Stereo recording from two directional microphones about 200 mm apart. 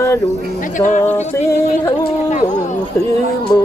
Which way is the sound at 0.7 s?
40° left (ahead or behind).